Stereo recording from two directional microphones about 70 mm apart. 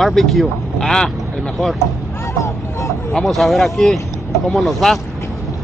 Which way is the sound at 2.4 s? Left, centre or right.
Left.